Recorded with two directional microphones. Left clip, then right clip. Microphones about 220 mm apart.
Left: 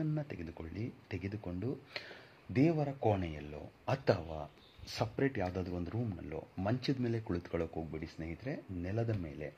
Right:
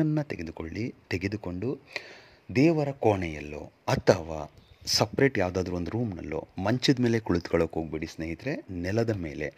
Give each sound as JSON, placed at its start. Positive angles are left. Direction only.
{"t": 0.0, "sound": "speech", "side_deg": -45}